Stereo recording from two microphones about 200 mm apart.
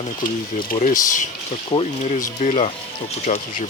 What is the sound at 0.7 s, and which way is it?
Speech, 40° left (ahead or behind).